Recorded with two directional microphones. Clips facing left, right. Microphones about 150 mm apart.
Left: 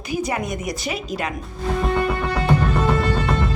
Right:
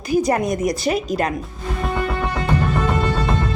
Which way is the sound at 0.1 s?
40° right (ahead or behind).